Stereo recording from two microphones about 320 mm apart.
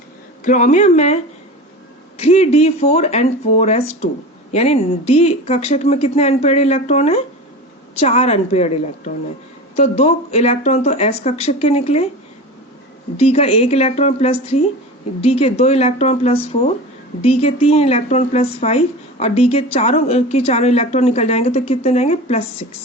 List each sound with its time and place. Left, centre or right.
0.4 s speech: left
13.1 s speech: centre